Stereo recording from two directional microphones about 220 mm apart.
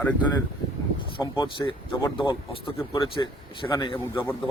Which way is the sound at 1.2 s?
20° left (ahead or behind).